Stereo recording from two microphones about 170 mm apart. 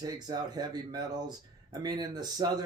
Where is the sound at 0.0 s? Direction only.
25° right (ahead or behind).